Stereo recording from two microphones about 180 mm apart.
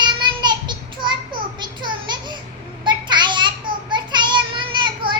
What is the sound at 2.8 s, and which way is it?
Child singing, 25° right (ahead or behind).